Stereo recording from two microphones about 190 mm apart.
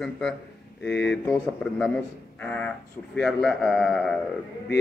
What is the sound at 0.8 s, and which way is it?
Speech, 65° left (ahead or behind).